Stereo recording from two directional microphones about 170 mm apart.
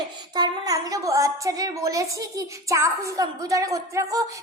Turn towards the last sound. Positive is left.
turn(degrees=-20)  # may be behind; listen again after turning